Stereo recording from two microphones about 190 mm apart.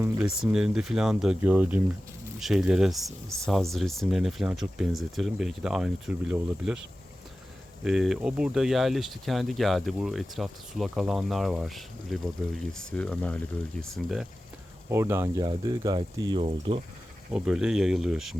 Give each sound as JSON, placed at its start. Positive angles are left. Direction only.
{"t": 0.0, "sound": "speech", "side_deg": -5}
{"t": 7.9, "sound": "speech", "side_deg": 0}
{"t": 14.8, "sound": "speech", "side_deg": -15}
{"t": 16.4, "sound": "speech", "side_deg": -30}
{"t": 17.3, "sound": "speech", "side_deg": -5}